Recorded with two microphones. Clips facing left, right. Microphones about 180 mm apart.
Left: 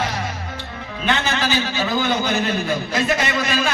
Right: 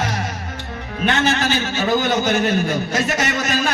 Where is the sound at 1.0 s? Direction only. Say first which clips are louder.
Right 3 dB; 45° right (ahead or behind).